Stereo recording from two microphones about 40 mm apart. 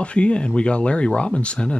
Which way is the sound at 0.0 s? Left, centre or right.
Left.